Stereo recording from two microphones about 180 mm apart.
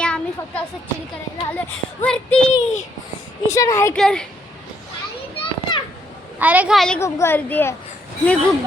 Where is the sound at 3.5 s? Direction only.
15° left (ahead or behind).